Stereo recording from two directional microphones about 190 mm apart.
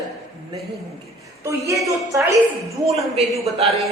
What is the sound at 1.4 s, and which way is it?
Speech, 15° right (ahead or behind).